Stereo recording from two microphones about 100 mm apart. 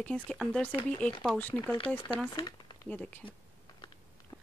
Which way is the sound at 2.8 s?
15° left (ahead or behind).